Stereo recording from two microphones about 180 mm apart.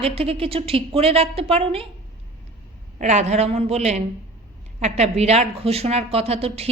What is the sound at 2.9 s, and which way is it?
A man's voice, 40° right (ahead or behind).